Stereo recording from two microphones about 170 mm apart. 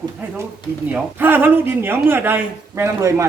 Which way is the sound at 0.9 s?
10° right (ahead or behind).